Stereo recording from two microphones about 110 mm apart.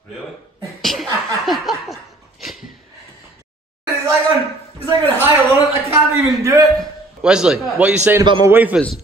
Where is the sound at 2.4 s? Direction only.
Centre (ahead or behind).